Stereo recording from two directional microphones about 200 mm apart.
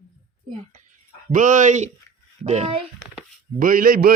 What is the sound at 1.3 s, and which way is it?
Speech, 40° right (ahead or behind).